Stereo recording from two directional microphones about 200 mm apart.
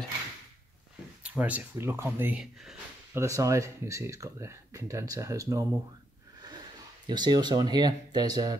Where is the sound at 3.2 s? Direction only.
15° right (ahead or behind).